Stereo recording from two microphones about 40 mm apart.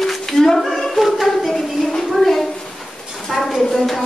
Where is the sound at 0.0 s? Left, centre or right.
Centre.